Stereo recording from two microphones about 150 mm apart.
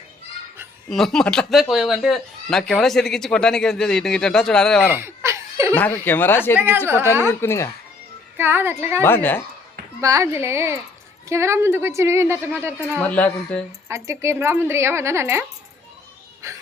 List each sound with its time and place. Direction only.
0.9 s speech: centre (ahead or behind)
4.9 s laughter: 15° right (ahead or behind)
5.7 s speech: 10° left (ahead or behind)
8.4 s speech: 15° right (ahead or behind)
9.0 s speech: 15° left (ahead or behind)
10.0 s speech: 20° right (ahead or behind)
13.0 s speech: 10° left (ahead or behind)
13.8 s speech: 20° right (ahead or behind)
16.4 s whimper: 20° right (ahead or behind)